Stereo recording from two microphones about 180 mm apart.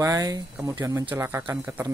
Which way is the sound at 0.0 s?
20° right (ahead or behind).